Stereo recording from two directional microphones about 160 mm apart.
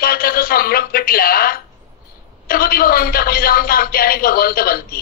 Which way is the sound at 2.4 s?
65° left (ahead or behind).